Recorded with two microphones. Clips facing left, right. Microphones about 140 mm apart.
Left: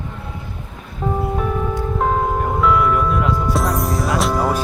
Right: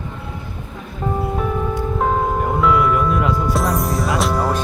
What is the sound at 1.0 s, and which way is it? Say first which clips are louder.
Music: left 1 dB; centre (ahead or behind).